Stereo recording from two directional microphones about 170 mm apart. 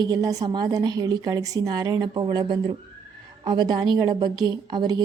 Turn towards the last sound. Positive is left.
turn(degrees=-25)  # may be behind; listen again after turning